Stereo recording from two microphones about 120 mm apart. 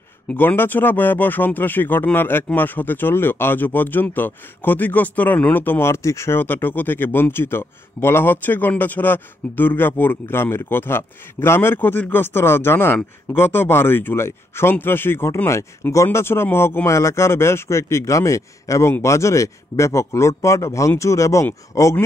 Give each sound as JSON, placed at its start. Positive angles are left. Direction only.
{"t": 0.3, "sound": "speech", "side_deg": 15}